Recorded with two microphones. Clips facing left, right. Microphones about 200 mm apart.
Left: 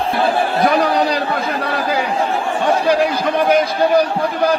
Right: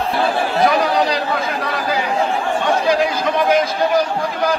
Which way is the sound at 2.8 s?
60° left (ahead or behind).